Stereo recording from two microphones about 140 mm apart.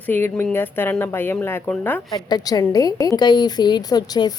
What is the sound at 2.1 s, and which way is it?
A woman's voice, 30° left (ahead or behind).